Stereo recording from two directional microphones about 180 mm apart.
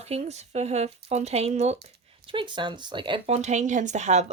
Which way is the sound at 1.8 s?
30° right (ahead or behind).